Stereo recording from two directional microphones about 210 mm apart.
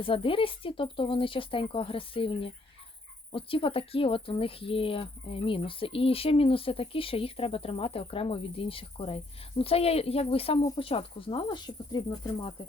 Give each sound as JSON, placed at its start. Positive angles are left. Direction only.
{"t": 0.0, "sound": "speech", "side_deg": 25}